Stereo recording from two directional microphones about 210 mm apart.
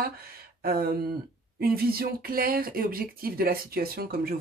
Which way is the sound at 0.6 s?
45° right (ahead or behind).